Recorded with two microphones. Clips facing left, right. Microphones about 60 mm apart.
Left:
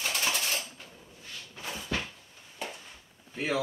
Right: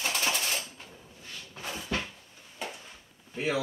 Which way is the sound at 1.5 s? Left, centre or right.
Right.